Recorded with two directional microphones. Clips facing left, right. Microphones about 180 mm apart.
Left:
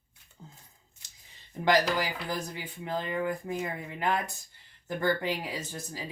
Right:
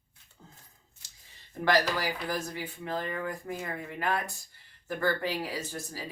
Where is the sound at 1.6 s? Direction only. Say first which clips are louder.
Left 1 dB; 20° left (ahead or behind).